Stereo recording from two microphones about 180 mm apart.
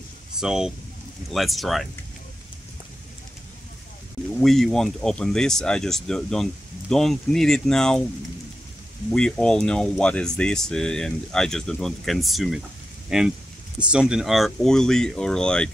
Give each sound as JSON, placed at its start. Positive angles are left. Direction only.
{"t": 0.4, "sound": "speech", "side_deg": -5}
{"t": 4.4, "sound": "speech", "side_deg": 0}
{"t": 9.1, "sound": "speech", "side_deg": 5}